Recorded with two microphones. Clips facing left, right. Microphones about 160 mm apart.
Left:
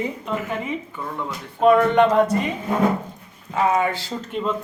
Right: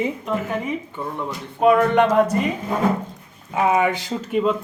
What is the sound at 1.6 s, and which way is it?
Speech, 5° right (ahead or behind).